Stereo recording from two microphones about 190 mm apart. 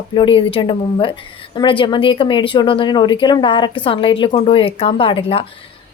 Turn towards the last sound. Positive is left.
turn(degrees=30)  # may be behind; listen again after turning